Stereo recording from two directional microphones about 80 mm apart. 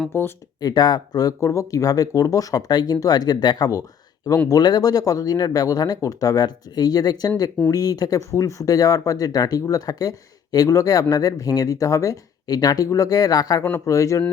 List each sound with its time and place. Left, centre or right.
0.1 s speech: left
0.6 s speech: left
1.4 s speech: left
8.3 s speech: left
13.7 s speech: left